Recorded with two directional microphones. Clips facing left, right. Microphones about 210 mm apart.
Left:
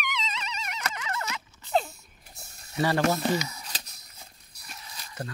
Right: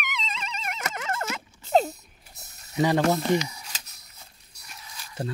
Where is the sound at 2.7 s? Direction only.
15° right (ahead or behind).